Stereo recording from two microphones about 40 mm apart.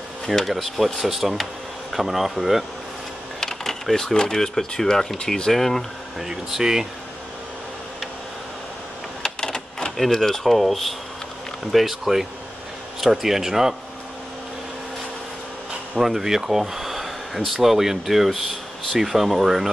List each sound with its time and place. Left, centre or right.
0.3 s speech: centre
3.3 s speech: centre
6.1 s speech: centre
9.2 s typewriter: centre
9.9 s speech: centre
16.0 s speech: centre